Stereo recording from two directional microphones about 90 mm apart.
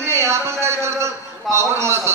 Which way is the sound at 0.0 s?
30° right (ahead or behind).